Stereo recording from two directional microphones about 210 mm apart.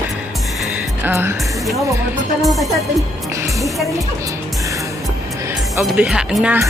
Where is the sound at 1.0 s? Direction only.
10° right (ahead or behind).